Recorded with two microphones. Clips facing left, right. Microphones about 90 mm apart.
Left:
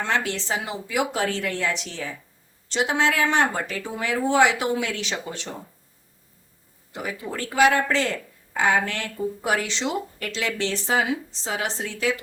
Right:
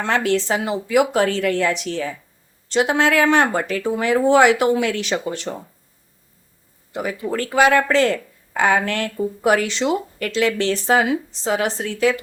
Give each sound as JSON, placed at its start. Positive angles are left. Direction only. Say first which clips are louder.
{"t": 0.0, "sound": "speech", "louder": "right 6 dB", "side_deg": -55}
{"t": 6.9, "sound": "speech", "louder": "right 7 dB", "side_deg": -60}